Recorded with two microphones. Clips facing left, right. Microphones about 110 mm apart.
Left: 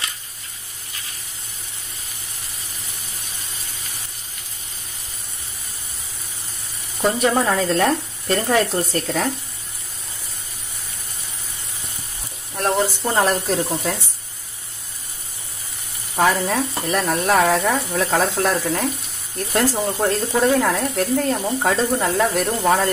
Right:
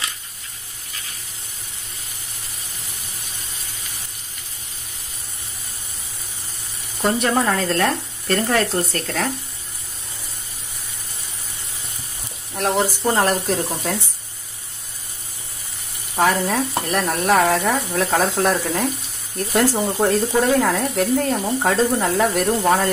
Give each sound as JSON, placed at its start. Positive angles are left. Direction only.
{"t": 7.0, "sound": "frying", "side_deg": 0}
{"t": 12.6, "sound": "frying", "side_deg": -5}
{"t": 16.2, "sound": "frying", "side_deg": 0}